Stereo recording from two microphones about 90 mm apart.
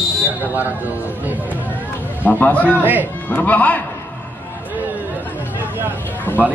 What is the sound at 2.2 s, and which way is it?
Speech, 20° left (ahead or behind).